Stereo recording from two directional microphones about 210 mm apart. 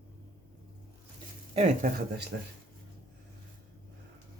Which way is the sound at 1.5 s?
35° right (ahead or behind).